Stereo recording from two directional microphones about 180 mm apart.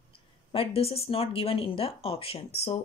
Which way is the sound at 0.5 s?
30° left (ahead or behind).